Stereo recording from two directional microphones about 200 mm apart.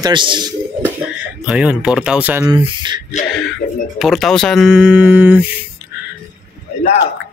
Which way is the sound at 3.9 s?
Centre (ahead or behind).